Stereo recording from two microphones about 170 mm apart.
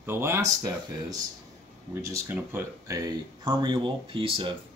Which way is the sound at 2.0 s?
15° right (ahead or behind).